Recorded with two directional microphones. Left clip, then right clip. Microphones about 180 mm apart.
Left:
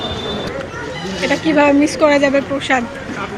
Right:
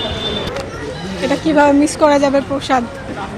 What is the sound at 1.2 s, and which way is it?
A woman's voice, 15° right (ahead or behind).